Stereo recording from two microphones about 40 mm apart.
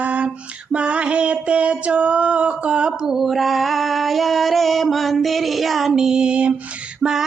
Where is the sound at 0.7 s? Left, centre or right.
Right.